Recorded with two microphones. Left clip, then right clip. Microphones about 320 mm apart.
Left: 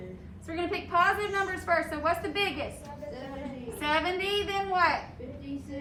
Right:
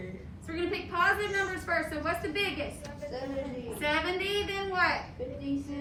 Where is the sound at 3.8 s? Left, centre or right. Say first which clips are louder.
Left 2 dB; centre.